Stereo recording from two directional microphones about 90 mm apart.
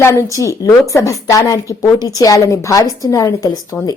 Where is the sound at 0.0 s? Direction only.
30° left (ahead or behind).